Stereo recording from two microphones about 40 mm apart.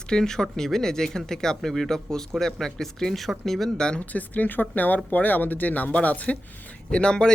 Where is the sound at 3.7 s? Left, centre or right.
Left.